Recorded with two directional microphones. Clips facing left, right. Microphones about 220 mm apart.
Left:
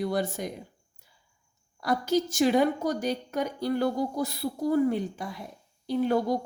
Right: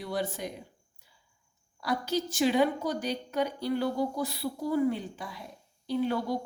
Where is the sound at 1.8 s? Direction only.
45° left (ahead or behind).